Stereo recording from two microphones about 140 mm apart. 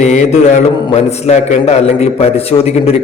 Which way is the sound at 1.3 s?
50° left (ahead or behind).